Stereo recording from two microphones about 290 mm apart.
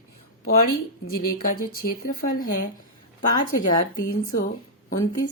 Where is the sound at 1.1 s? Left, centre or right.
Left.